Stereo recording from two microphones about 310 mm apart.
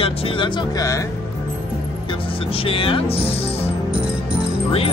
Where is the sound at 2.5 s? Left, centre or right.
Centre.